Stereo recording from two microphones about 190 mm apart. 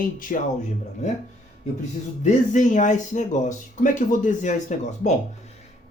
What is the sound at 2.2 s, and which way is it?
Speech, 40° left (ahead or behind).